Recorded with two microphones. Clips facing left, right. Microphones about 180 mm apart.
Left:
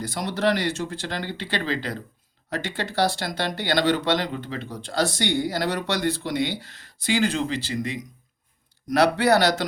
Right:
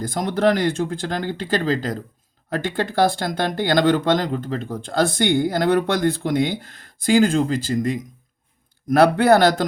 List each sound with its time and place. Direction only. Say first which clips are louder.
0.0 s speech: right 5 dB; 50° right (ahead or behind)